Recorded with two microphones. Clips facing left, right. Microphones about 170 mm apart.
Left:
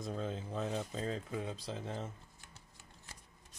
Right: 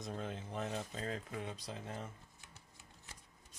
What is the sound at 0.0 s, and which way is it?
Speech, 30° left (ahead or behind).